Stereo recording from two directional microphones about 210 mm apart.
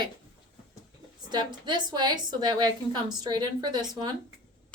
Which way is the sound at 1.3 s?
20° right (ahead or behind).